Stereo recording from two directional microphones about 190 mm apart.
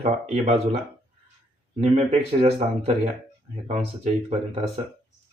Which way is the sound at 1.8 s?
30° right (ahead or behind).